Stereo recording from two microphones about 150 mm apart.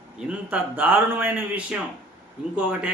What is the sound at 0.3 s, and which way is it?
A man's voice, 10° right (ahead or behind).